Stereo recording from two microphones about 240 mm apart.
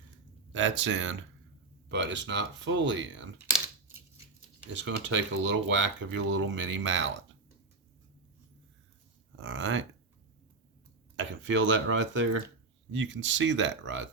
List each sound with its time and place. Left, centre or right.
0.5 s speech: right
4.7 s speech: right
9.3 s speech: right
11.2 s speech: right